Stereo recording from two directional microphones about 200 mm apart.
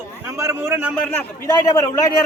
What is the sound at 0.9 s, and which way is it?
A man's voice, 10° left (ahead or behind).